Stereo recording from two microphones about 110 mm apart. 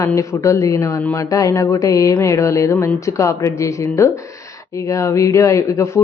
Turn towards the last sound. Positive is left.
turn(degrees=25)  # may be behind; listen again after turning